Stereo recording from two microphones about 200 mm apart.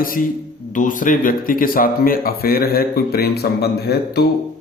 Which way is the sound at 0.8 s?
40° left (ahead or behind).